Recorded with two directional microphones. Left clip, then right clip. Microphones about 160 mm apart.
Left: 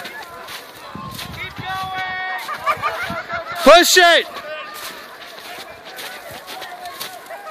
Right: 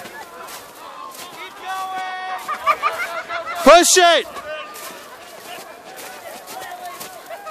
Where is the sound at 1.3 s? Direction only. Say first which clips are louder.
Left 1 dB; 10° right (ahead or behind).